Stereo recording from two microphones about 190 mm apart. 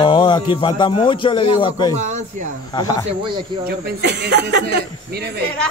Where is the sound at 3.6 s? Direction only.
60° right (ahead or behind).